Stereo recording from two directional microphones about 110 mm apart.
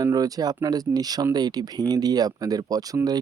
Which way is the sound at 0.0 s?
35° right (ahead or behind).